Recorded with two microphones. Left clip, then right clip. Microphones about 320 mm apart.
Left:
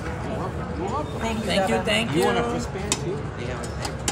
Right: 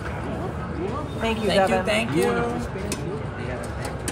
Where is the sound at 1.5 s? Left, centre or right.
Centre.